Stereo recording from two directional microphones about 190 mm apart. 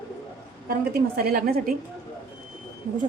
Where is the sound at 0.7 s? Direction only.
50° right (ahead or behind).